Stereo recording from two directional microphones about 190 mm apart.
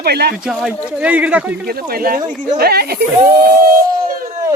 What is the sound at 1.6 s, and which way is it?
Speech, 55° right (ahead or behind).